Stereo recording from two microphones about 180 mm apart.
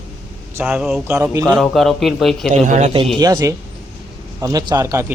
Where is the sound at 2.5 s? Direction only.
40° right (ahead or behind).